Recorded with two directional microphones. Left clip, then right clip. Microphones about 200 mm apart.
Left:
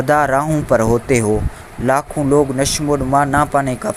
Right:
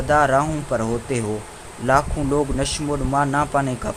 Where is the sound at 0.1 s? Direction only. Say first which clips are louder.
Left 2 dB; 35° left (ahead or behind).